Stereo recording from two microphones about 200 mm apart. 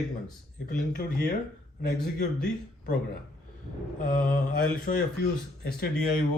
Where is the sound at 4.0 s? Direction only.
45° left (ahead or behind).